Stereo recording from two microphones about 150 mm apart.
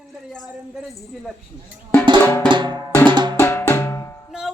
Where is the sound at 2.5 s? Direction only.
30° right (ahead or behind).